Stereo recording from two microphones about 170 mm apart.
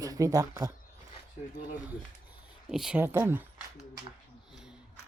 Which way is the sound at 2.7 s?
5° right (ahead or behind).